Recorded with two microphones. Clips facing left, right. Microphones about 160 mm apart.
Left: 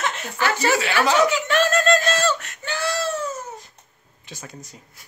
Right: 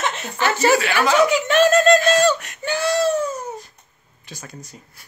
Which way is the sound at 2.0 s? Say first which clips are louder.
Right 5 dB; 15° right (ahead or behind).